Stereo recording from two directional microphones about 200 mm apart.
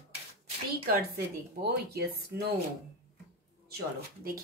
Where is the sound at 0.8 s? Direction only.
55° right (ahead or behind).